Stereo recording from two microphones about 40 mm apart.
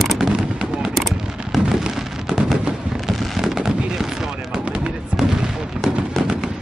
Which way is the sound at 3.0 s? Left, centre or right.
Centre.